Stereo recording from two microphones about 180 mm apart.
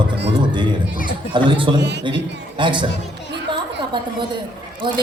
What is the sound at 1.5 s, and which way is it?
Speech, 30° right (ahead or behind).